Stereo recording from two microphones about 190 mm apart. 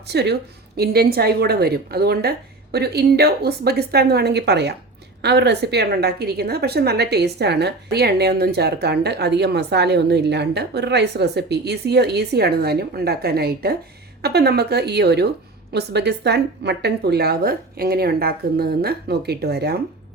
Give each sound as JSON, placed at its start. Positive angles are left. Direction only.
{"t": 0.1, "sound": "a woman's voice", "side_deg": -60}